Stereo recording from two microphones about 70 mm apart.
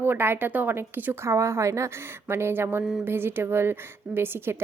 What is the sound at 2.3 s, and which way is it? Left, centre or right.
A woman's voice, right.